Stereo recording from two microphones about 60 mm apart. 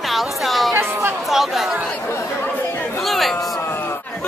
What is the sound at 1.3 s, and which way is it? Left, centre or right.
Speech, centre.